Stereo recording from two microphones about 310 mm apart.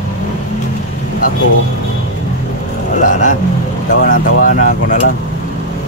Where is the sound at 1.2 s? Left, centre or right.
Left.